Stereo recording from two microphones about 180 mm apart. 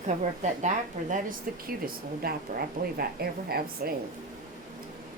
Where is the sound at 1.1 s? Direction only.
50° right (ahead or behind).